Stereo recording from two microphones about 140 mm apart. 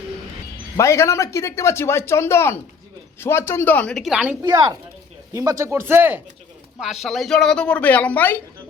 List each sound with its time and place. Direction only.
0.8 s speech: 20° left (ahead or behind); by 4.4 s 5° right (ahead or behind)
4.4 s speech: 30° right (ahead or behind)
6.7 s speech: centre (ahead or behind)